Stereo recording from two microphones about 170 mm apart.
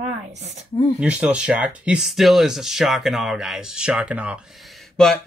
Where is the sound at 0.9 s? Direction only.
5° right (ahead or behind).